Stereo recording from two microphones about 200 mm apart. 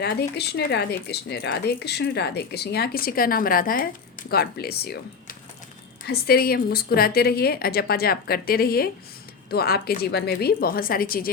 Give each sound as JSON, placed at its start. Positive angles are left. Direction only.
{"t": 0.0, "sound": "speech", "side_deg": 55}